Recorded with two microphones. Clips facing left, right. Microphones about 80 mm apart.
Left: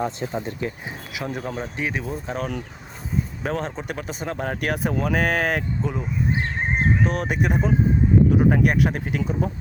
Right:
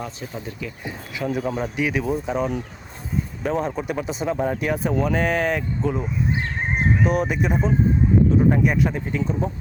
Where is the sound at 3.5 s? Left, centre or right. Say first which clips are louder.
Right 4 dB; centre.